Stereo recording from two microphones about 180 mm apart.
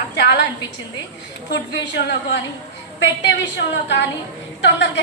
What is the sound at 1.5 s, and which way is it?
A woman's voice, 70° left (ahead or behind).